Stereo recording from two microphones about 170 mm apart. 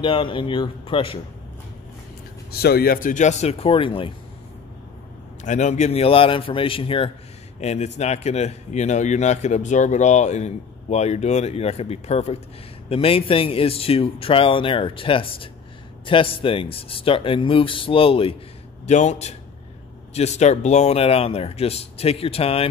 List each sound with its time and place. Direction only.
0.0 s speech: 30° left (ahead or behind)
2.5 s speech: 65° left (ahead or behind); by 4.1 s 30° left (ahead or behind)
5.4 s speech: 45° left (ahead or behind)